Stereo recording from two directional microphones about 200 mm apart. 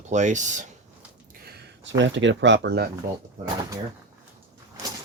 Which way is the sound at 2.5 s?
50° right (ahead or behind).